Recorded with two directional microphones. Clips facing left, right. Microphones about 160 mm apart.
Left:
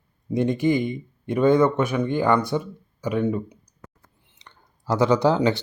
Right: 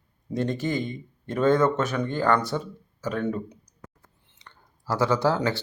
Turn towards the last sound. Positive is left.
turn(degrees=15)  # may be behind; listen again after turning